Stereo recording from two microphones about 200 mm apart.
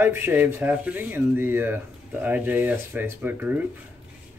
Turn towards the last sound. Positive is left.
turn(degrees=-10)  # may be behind; listen again after turning